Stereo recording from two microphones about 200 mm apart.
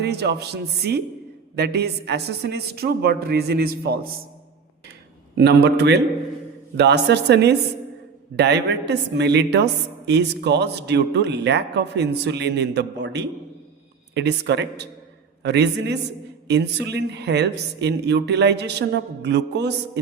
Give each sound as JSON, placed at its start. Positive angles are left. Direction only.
{"t": 0.0, "sound": "a woman's voice", "side_deg": -55}
{"t": 5.6, "sound": "a woman's voice", "side_deg": -55}